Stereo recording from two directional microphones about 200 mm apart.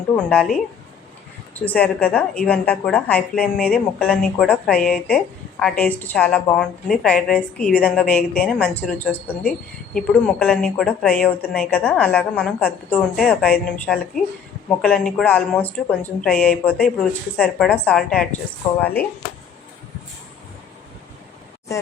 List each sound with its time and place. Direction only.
0.1 s a woman's voice: 5° left (ahead or behind)